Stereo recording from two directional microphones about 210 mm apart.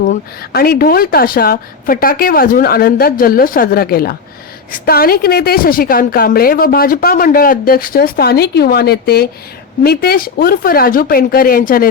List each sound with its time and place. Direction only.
0.0 s a woman's voice: 40° left (ahead or behind)